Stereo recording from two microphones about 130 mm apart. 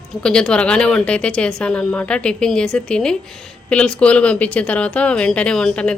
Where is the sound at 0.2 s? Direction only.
5° left (ahead or behind).